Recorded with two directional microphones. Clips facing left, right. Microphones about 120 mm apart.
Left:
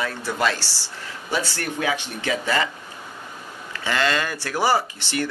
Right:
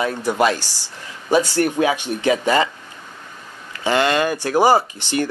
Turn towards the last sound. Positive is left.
turn(degrees=-15)  # may be behind; listen again after turning